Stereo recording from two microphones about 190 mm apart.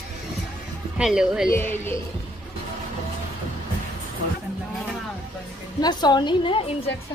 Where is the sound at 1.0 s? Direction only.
5° right (ahead or behind).